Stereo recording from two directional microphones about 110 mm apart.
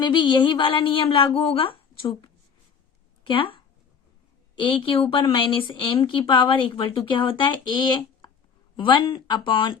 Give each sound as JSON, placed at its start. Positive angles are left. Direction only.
{"t": 0.0, "sound": "a woman's voice", "side_deg": 45}
{"t": 4.6, "sound": "a woman's voice", "side_deg": 50}